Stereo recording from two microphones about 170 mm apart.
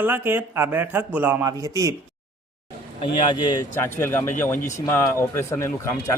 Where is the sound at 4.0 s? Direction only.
10° left (ahead or behind).